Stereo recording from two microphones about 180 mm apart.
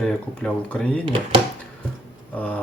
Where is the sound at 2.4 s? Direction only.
10° left (ahead or behind).